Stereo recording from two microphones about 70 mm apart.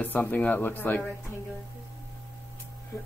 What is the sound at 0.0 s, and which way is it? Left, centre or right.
Speech, left.